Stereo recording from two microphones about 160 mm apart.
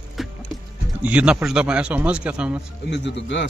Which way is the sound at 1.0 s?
5° right (ahead or behind).